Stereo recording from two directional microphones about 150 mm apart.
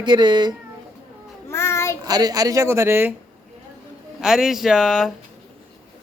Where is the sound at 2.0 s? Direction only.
25° right (ahead or behind).